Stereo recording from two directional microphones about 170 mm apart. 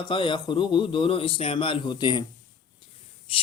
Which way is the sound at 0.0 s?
30° left (ahead or behind).